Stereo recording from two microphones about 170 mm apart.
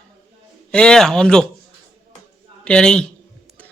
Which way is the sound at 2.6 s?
5° left (ahead or behind).